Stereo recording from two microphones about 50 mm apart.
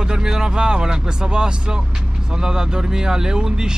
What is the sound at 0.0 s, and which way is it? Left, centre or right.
Speech, centre.